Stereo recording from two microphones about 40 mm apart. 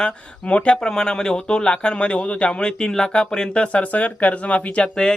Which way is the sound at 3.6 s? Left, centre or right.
Left.